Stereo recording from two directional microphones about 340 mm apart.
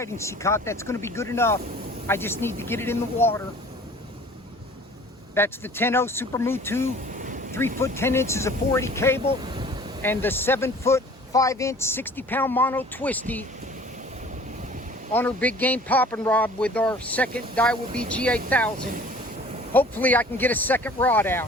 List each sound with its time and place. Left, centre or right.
0.0 s speech: centre
5.3 s speech: centre
7.1 s a sound: right
7.8 s speech: centre
9.4 s vehicle: centre
10.0 s speech: centre
15.1 s speech: centre
18.8 s speech: right
19.7 s speech: centre